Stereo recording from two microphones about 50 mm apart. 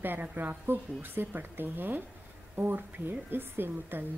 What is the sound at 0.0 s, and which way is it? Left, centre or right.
A woman's voice, right.